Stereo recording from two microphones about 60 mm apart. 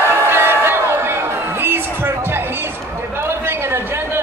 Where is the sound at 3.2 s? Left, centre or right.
Right.